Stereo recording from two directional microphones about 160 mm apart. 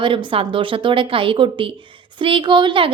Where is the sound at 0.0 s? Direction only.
30° right (ahead or behind).